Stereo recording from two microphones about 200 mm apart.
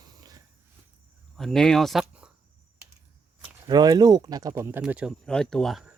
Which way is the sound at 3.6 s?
20° right (ahead or behind).